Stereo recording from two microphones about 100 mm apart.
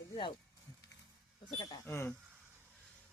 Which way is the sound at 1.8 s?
25° left (ahead or behind).